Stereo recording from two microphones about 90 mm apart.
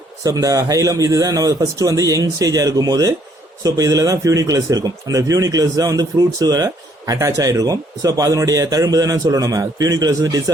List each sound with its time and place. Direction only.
0.3 s speech: 40° right (ahead or behind)